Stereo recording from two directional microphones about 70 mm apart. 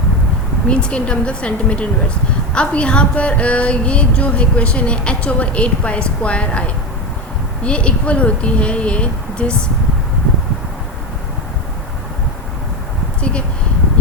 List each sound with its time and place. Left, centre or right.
0.7 s music: centre